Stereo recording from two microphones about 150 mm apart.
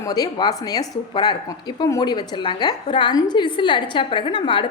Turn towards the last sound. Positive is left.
turn(degrees=30)  # may be behind; listen again after turning